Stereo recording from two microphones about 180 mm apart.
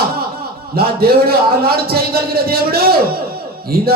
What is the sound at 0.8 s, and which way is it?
A man's voice, 60° right (ahead or behind).